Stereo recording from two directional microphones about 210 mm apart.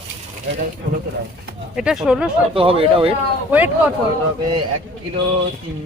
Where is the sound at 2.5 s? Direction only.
25° right (ahead or behind).